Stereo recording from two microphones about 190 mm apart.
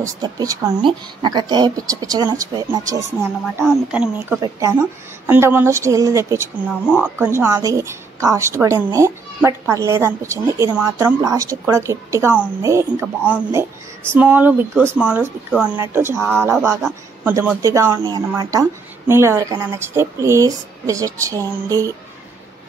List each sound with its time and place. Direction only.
0.0 s speech: 15° right (ahead or behind)
3.6 s a woman's voice: 5° right (ahead or behind)
4.4 s a woman's voice: 15° right (ahead or behind)